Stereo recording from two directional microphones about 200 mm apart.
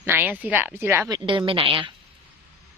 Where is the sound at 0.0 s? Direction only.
10° right (ahead or behind); by 1.9 s 25° right (ahead or behind).